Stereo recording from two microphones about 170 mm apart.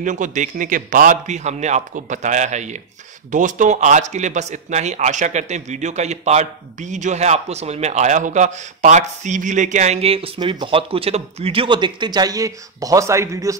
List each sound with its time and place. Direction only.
0.0 s a man's voice: 45° right (ahead or behind); by 13.6 s 20° right (ahead or behind)